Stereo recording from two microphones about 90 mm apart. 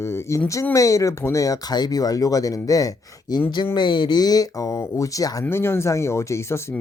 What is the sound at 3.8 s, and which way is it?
Speech, 60° left (ahead or behind).